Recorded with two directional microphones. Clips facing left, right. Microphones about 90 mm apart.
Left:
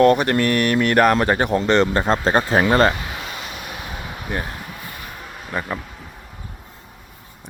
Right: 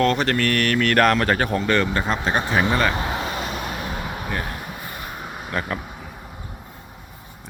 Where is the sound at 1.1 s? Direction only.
20° left (ahead or behind); by 2.9 s 35° left (ahead or behind).